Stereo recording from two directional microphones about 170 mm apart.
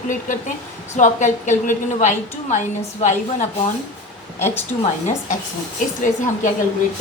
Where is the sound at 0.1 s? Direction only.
50° left (ahead or behind).